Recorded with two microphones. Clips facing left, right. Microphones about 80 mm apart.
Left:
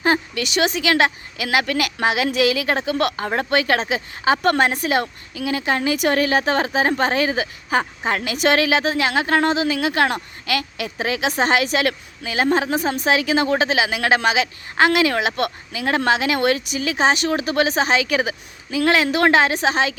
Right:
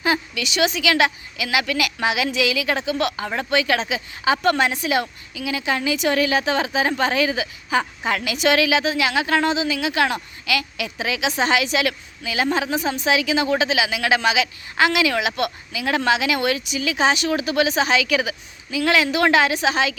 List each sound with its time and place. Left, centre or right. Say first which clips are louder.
0.0 s a woman's voice: left 3 dB; left